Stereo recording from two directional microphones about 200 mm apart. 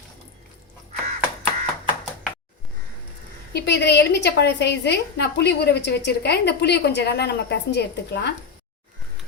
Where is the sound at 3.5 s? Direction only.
55° left (ahead or behind).